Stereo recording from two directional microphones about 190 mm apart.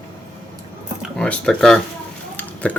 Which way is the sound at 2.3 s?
5° left (ahead or behind).